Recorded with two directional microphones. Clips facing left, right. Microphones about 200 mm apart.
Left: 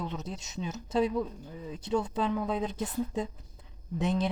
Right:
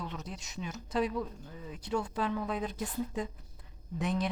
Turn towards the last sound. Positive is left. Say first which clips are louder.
# left 3 dB
turn(degrees=25)  # may be behind; listen again after turning